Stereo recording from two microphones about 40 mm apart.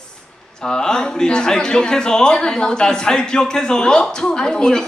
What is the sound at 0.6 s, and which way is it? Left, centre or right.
Speech, centre.